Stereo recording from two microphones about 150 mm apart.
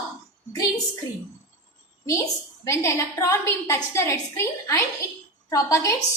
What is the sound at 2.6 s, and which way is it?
A woman's voice, 20° left (ahead or behind).